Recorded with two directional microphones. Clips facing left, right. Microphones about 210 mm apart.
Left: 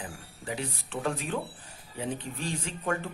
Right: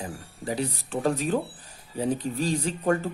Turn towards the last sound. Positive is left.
turn(degrees=-40)  # may be behind; listen again after turning